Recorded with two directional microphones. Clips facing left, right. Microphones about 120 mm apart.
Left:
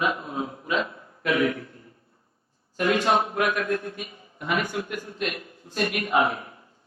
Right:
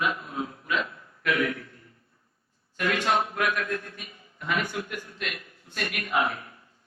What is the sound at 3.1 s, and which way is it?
A man's voice, 25° left (ahead or behind).